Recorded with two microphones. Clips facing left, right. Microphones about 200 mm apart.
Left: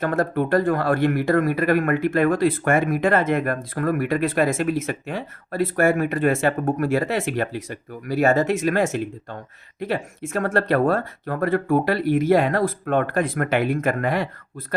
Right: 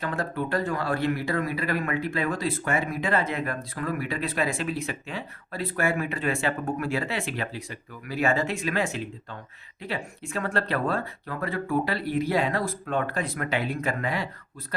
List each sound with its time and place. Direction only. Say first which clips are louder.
0.0 s speech: left 8 dB; 50° left (ahead or behind)